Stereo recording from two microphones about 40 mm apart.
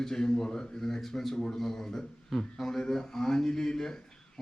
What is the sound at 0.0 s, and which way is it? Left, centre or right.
Speech, centre.